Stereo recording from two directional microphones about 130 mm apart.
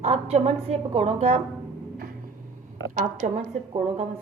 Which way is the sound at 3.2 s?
80° right.